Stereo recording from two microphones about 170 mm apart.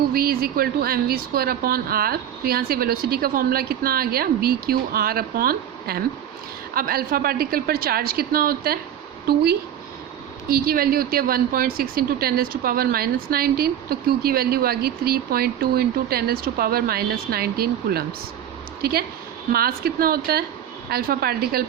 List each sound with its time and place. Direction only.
0.1 s a woman's voice: 65° right (ahead or behind)